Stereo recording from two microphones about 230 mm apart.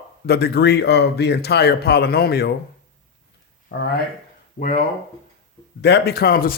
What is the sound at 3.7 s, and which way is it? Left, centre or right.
Speech, left.